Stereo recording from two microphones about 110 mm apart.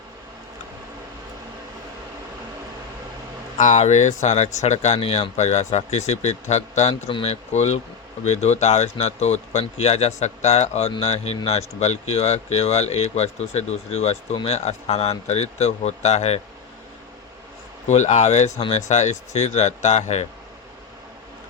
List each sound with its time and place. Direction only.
3.7 s speech: 90° left
7.1 s speech: 55° left (ahead or behind)
7.5 s speech: 90° left
17.8 s speech: 90° left